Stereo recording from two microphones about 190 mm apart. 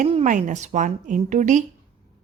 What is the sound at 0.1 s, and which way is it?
A woman's voice, 40° right (ahead or behind).